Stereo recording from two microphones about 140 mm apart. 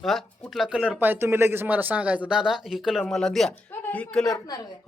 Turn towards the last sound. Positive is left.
turn(degrees=5)  # may be behind; listen again after turning